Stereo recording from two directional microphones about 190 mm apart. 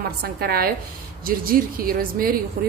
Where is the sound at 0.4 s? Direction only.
55° right (ahead or behind).